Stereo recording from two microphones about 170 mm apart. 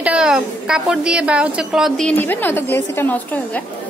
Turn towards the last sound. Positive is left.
turn(degrees=10)  # may be behind; listen again after turning